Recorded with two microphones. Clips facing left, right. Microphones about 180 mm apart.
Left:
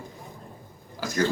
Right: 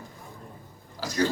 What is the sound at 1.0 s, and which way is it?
Speech, 50° left (ahead or behind).